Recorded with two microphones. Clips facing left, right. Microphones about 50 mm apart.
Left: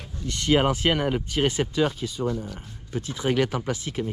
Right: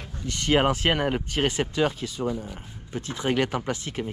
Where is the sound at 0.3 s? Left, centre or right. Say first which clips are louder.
Even; right.